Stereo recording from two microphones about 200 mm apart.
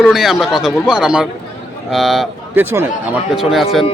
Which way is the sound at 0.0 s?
Centre (ahead or behind).